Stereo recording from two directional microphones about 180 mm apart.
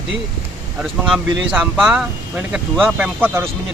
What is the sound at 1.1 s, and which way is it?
Speech, centre (ahead or behind).